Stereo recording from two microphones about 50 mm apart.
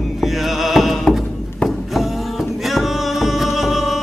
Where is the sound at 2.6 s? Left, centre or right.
Centre.